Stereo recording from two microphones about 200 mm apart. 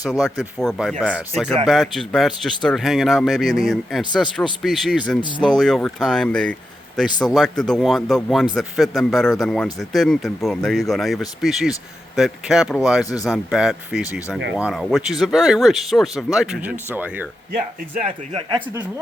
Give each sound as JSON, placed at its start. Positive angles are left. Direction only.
{"t": 0.0, "sound": "speech", "side_deg": 0}
{"t": 18.0, "sound": "speech", "side_deg": -25}